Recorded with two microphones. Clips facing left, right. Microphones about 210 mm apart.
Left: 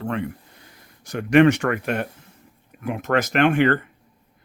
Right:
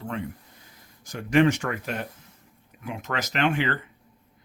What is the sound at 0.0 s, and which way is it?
Speech, 70° left (ahead or behind).